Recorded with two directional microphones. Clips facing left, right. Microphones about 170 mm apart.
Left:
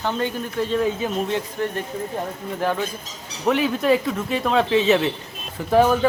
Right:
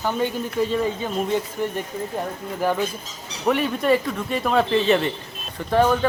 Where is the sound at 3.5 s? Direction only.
Centre (ahead or behind).